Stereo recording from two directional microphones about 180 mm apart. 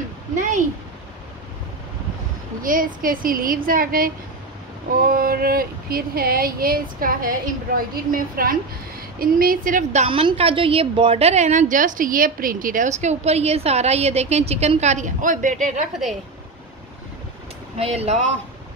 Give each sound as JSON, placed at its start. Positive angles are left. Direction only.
{"t": 0.4, "sound": "a sound", "side_deg": -45}
{"t": 2.6, "sound": "a woman's voice", "side_deg": -50}
{"t": 5.1, "sound": "a woman's voice", "side_deg": -55}
{"t": 10.0, "sound": "a woman's voice", "side_deg": -30}
{"t": 17.7, "sound": "a woman's voice", "side_deg": -35}